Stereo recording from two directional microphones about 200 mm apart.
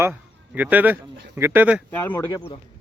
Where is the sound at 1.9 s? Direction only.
10° left (ahead or behind).